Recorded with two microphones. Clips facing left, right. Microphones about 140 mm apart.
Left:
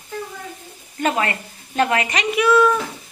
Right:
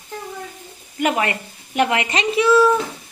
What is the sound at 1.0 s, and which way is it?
A woman's voice, 20° right (ahead or behind).